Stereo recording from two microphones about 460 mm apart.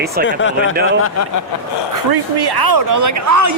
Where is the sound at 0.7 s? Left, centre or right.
Centre.